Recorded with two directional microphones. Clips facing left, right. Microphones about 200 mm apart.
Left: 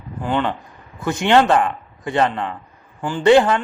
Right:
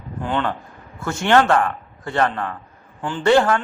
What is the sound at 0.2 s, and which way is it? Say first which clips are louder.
A man's voice: left 2 dB; 10° left (ahead or behind).